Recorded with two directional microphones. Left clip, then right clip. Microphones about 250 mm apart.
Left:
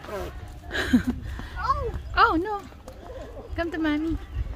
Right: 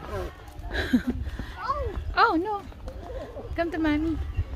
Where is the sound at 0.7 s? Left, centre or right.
Centre.